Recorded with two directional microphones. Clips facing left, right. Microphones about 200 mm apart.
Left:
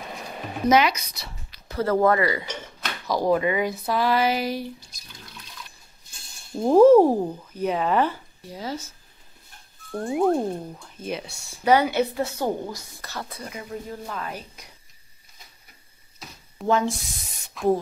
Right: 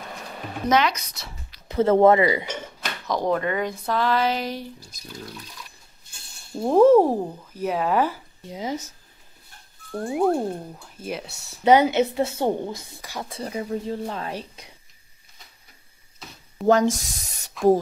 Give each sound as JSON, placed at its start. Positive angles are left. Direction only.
{"t": 0.7, "sound": "speech", "side_deg": 10}
{"t": 1.7, "sound": "a woman's voice", "side_deg": -25}
{"t": 3.1, "sound": "speech", "side_deg": 5}
{"t": 6.5, "sound": "speech", "side_deg": 0}
{"t": 8.5, "sound": "a woman's voice", "side_deg": -20}
{"t": 9.8, "sound": "speech", "side_deg": -5}
{"t": 11.6, "sound": "a woman's voice", "side_deg": -20}
{"t": 13.0, "sound": "speech", "side_deg": -15}
{"t": 13.3, "sound": "a woman's voice", "side_deg": -30}
{"t": 16.6, "sound": "speech", "side_deg": -40}